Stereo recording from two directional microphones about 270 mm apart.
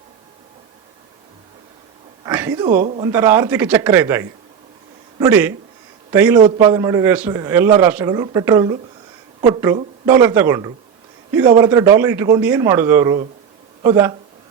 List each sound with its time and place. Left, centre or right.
2.2 s a man's voice: centre